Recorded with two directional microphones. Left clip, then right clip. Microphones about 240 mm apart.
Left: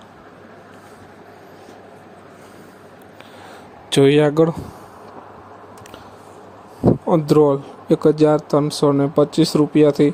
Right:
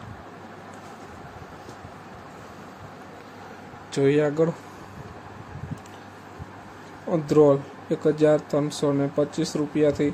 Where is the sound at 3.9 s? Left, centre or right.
Left.